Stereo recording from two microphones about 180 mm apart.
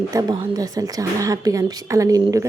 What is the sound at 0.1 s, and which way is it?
A woman's voice, 20° right (ahead or behind).